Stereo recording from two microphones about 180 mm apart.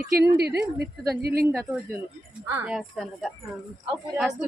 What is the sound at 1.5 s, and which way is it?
Speech, 5° left (ahead or behind).